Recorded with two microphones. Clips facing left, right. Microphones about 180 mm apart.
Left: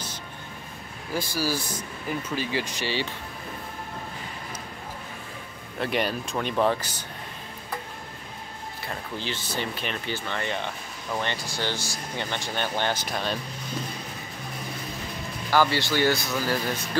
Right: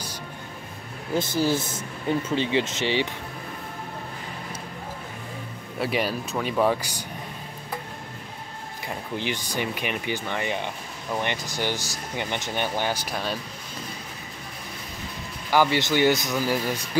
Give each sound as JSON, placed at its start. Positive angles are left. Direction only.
{"t": 1.1, "sound": "speech", "side_deg": -25}
{"t": 5.8, "sound": "speech", "side_deg": -5}
{"t": 8.8, "sound": "speech", "side_deg": -15}
{"t": 15.5, "sound": "speech", "side_deg": -15}